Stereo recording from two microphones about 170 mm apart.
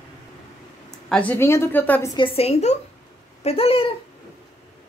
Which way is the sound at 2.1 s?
35° left (ahead or behind).